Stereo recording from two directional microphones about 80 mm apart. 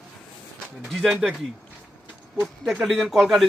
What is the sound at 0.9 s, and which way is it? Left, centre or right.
Speech, centre.